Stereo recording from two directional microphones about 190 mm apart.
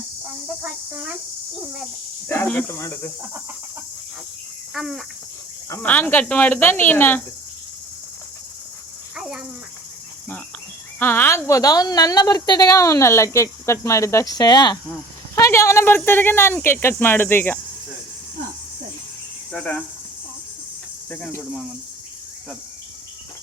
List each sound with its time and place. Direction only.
0.6 s cricket: 5° right (ahead or behind)
2.2 s a woman's voice: 10° left (ahead or behind)
4.7 s cricket: centre (ahead or behind)
5.6 s a woman's voice: 10° left (ahead or behind)
9.1 s a sound: 5° right (ahead or behind)
11.0 s a woman's voice: 10° left (ahead or behind)
19.5 s cricket: 5° left (ahead or behind)
21.1 s cricket: 5° left (ahead or behind)